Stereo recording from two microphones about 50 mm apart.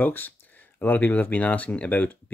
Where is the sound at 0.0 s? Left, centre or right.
Left.